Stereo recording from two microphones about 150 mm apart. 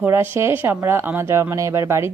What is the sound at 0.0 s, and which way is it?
A woman's voice, 15° right (ahead or behind).